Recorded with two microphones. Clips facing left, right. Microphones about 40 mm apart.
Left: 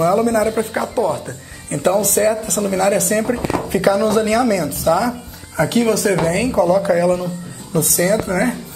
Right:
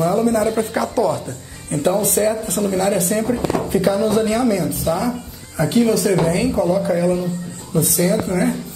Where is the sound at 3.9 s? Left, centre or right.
Left.